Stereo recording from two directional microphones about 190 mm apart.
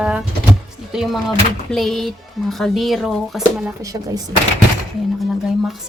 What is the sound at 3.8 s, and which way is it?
Speech, 20° right (ahead or behind).